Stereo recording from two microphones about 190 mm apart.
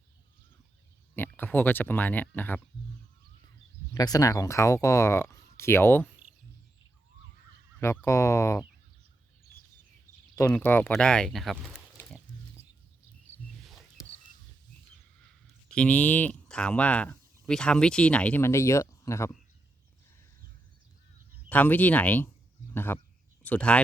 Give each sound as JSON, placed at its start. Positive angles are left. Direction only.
{"t": 1.1, "sound": "speech", "side_deg": 10}
{"t": 3.9, "sound": "speech", "side_deg": 20}
{"t": 7.8, "sound": "speech", "side_deg": 15}
{"t": 10.3, "sound": "speech", "side_deg": 15}
{"t": 12.0, "sound": "pig", "side_deg": 10}
{"t": 13.6, "sound": "a sound", "side_deg": 0}
{"t": 15.7, "sound": "speech", "side_deg": 5}
{"t": 21.5, "sound": "speech", "side_deg": 10}